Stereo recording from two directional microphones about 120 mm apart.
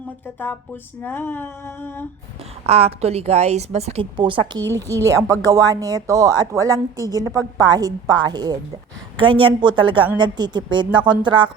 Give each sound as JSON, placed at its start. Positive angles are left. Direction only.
{"t": 1.0, "sound": "a sound", "side_deg": 15}
{"t": 2.6, "sound": "a woman's voice", "side_deg": -60}
{"t": 4.2, "sound": "a woman's voice", "side_deg": -40}
{"t": 4.9, "sound": "a woman's voice", "side_deg": -30}